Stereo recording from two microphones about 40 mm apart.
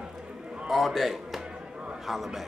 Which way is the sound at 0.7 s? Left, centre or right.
Centre.